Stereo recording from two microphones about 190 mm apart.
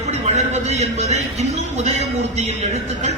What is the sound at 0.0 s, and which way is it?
Speech, 35° right (ahead or behind).